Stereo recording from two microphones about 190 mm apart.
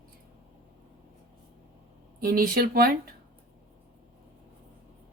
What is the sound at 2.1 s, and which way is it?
Speech, 50° right (ahead or behind).